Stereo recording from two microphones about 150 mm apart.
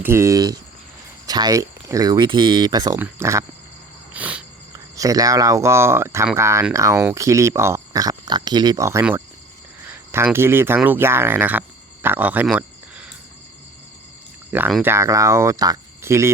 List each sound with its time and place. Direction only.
0.0 s speech: 20° right (ahead or behind)
3.0 s speech: 15° right (ahead or behind)
4.1 s cricket: 10° right (ahead or behind)
4.9 s speech: 25° right (ahead or behind)
14.8 s speech: 15° right (ahead or behind)